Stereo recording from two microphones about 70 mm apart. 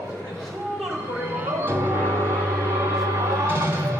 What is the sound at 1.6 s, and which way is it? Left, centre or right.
Music, right.